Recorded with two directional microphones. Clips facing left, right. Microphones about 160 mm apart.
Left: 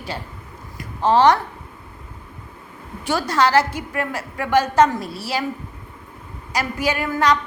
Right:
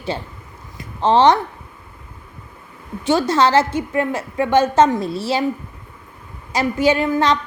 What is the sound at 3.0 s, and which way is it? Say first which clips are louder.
A woman's voice: right 4 dB; 20° right (ahead or behind).